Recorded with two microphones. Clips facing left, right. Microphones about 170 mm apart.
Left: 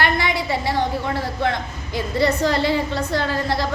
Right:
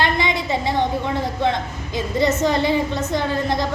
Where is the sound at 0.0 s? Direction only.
20° right (ahead or behind).